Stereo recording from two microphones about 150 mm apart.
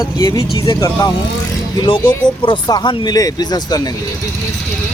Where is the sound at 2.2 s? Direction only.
30° left (ahead or behind).